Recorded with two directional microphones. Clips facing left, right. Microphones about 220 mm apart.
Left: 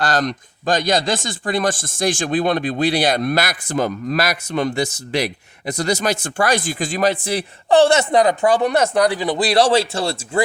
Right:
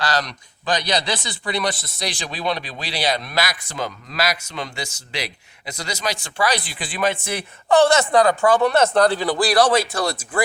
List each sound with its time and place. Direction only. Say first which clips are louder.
0.0 s speech: left 4 dB; 50° left (ahead or behind); by 10.4 s 30° left (ahead or behind)